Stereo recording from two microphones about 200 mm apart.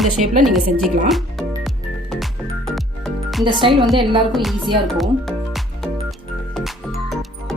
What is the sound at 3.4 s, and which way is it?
Speech, 25° right (ahead or behind).